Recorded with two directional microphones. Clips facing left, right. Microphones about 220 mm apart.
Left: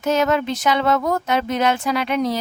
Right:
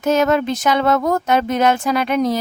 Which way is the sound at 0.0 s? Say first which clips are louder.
Right 3 dB; 45° right (ahead or behind).